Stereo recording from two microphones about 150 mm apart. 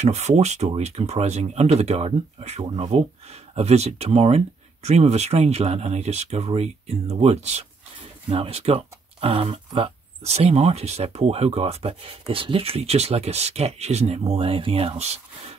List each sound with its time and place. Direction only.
0.0 s speech: 50° right (ahead or behind)